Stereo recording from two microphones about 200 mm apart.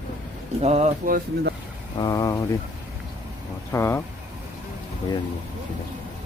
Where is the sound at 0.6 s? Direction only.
30° right (ahead or behind).